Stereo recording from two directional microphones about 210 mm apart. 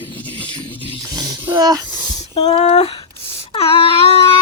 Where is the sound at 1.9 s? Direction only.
30° left (ahead or behind).